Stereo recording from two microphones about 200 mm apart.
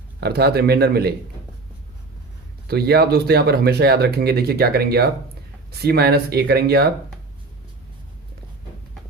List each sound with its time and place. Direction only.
0.2 s speech: 55° right (ahead or behind)
2.6 s speech: 55° right (ahead or behind)